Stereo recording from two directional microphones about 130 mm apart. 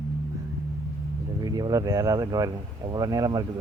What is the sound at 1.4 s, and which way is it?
Speech, 30° right (ahead or behind).